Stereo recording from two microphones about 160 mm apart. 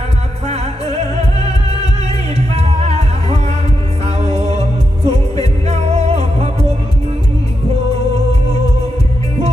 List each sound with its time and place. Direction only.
0.4 s music: 40° right (ahead or behind)